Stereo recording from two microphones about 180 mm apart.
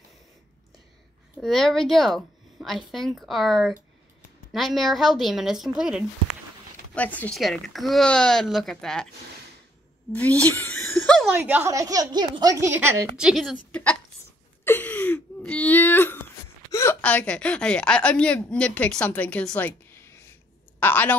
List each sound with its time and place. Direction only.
1.4 s a woman's voice: centre (ahead or behind)
7.0 s a woman's voice: 10° left (ahead or behind)
10.4 s chuckle: 10° left (ahead or behind)
11.4 s a woman's voice: 10° right (ahead or behind)
13.2 s a woman's voice: centre (ahead or behind)
14.6 s a sound: 10° left (ahead or behind)
20.8 s speech: 10° left (ahead or behind)